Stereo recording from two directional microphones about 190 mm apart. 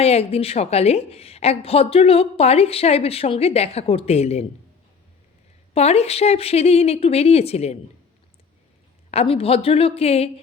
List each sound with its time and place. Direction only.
0.0 s a woman's voice: 30° left (ahead or behind)
5.7 s a woman's voice: 35° left (ahead or behind)
9.0 s a woman's voice: 30° left (ahead or behind)